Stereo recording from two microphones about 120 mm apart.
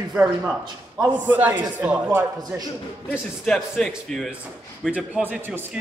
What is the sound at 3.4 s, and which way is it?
Speech, 5° left (ahead or behind).